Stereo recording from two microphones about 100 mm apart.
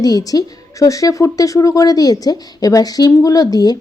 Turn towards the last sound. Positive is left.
turn(degrees=40)  # may be behind; listen again after turning